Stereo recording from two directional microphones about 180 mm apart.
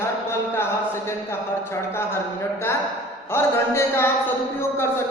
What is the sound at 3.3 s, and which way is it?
A woman's voice, 15° left (ahead or behind).